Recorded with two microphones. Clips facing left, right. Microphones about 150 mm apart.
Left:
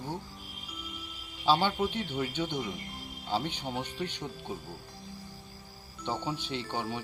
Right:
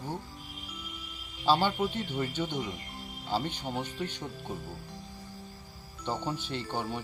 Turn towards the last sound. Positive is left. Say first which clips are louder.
# even
turn(degrees=-5)  # may be behind; listen again after turning